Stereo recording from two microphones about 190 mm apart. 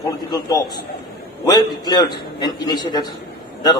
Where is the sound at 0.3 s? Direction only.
20° left (ahead or behind).